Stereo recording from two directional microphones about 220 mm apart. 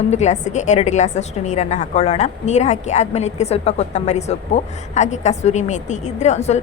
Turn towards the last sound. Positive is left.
turn(degrees=30)  # may be behind; listen again after turning